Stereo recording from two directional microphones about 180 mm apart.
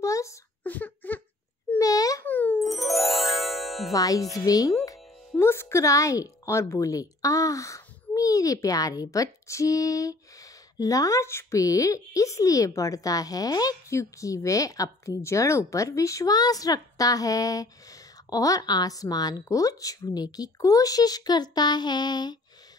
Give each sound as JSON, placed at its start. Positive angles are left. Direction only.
{"t": 0.0, "sound": "a sound", "side_deg": 15}
{"t": 2.6, "sound": "music", "side_deg": 0}
{"t": 3.9, "sound": "a woman's voice", "side_deg": 20}